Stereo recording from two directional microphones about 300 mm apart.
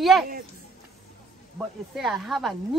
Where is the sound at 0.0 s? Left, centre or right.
Centre.